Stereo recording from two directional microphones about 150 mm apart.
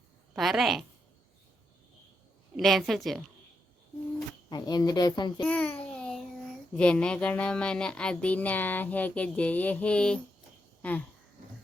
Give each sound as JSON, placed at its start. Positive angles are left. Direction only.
{"t": 0.3, "sound": "a woman's voice", "side_deg": 0}
{"t": 2.6, "sound": "a woman's voice", "side_deg": 0}
{"t": 4.4, "sound": "speech", "side_deg": 25}
{"t": 5.4, "sound": "a sound", "side_deg": 10}
{"t": 6.7, "sound": "a child's voice", "side_deg": 5}